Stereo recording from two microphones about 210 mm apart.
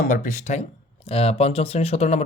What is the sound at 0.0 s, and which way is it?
Speech, 40° left (ahead or behind).